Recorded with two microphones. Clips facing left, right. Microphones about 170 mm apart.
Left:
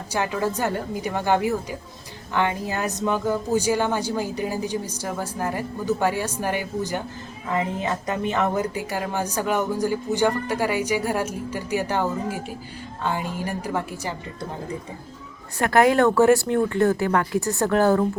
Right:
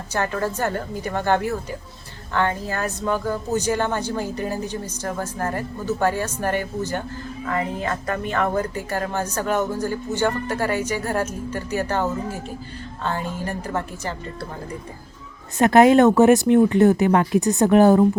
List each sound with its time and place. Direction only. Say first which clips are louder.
0.1 s speech: even; 10° left (ahead or behind)
15.5 s speech: right 5 dB; 20° right (ahead or behind)